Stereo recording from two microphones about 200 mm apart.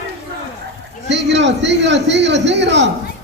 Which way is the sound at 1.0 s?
60° right (ahead or behind).